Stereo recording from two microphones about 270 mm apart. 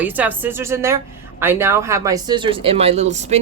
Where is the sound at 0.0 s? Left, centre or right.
Centre.